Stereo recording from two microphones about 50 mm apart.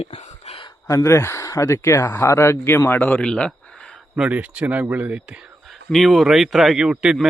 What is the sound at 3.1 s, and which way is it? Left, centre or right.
Speech, centre.